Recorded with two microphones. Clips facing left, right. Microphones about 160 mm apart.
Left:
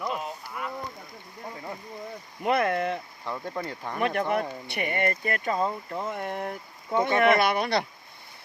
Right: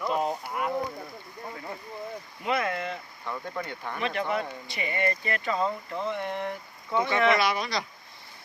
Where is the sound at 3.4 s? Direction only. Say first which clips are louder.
Left 2 dB; 30° left (ahead or behind).